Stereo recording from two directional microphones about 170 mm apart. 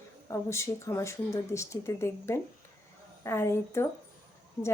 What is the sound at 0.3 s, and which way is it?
A woman's voice, 15° left (ahead or behind).